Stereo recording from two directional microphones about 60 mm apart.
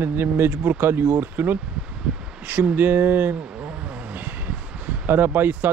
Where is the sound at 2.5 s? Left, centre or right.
Right.